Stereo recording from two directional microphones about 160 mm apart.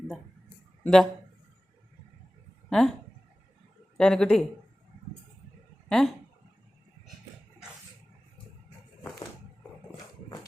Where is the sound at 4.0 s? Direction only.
5° left (ahead or behind).